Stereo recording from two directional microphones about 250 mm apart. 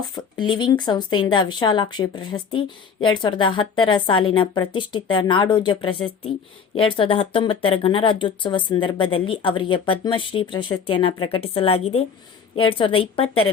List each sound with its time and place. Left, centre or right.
0.1 s speech: centre